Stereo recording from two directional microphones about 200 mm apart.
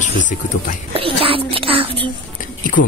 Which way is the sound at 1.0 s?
30° right (ahead or behind).